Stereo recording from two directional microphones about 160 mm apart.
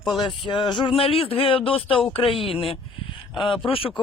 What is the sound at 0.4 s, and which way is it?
Speech, 30° left (ahead or behind).